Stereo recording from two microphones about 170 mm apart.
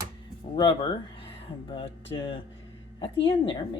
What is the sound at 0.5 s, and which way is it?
A woman's voice, 25° left (ahead or behind).